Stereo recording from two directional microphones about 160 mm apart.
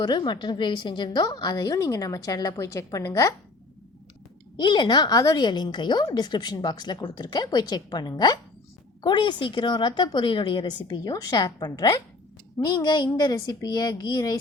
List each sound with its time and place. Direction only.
0.0 s a woman's voice: 30° left (ahead or behind)
4.5 s a woman's voice: 30° left (ahead or behind)